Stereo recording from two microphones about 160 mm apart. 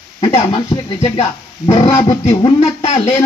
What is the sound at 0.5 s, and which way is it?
Speech, 25° left (ahead or behind).